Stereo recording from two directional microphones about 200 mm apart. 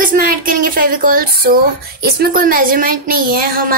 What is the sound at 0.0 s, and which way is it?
Speech, 45° right (ahead or behind).